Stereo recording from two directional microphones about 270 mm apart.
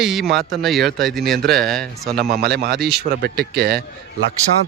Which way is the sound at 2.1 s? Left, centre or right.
Right.